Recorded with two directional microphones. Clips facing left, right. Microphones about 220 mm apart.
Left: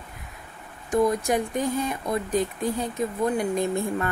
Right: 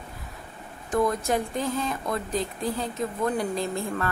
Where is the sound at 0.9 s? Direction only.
15° left (ahead or behind).